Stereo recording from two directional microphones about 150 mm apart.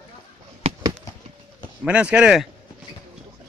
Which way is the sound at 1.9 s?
10° right (ahead or behind).